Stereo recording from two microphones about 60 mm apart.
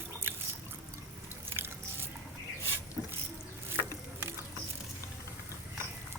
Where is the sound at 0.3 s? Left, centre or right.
Right.